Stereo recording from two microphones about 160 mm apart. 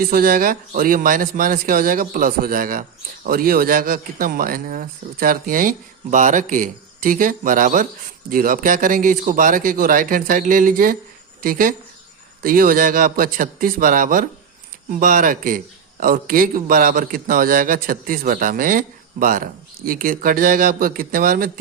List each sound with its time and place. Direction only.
0.0 s a man's voice: 65° right (ahead or behind)